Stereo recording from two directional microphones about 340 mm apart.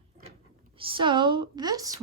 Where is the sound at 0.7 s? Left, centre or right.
Centre.